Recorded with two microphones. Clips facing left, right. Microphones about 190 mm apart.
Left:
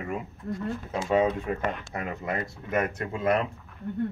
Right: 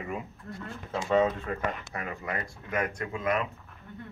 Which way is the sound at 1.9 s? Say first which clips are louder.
Left 4 dB; 20° left (ahead or behind).